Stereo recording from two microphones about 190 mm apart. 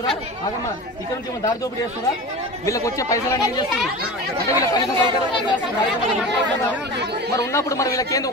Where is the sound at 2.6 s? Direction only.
15° left (ahead or behind).